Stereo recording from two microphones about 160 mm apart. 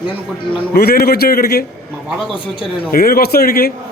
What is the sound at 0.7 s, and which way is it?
Speech, 75° left (ahead or behind).